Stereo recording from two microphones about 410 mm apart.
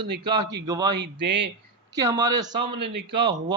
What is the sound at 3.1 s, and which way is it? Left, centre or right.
Speech, centre.